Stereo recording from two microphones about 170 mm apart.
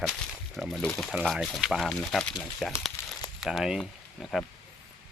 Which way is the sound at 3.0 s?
15° left (ahead or behind).